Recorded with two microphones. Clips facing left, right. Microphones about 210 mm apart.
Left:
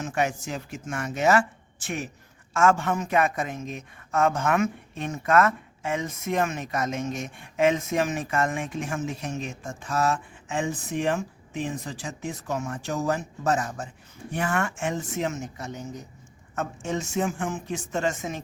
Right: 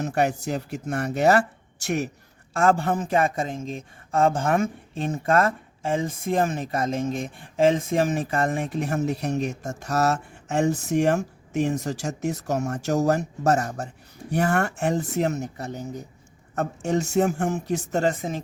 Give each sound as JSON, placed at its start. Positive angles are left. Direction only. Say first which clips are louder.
{"t": 0.0, "sound": "speech", "louder": "right 4 dB", "side_deg": -35}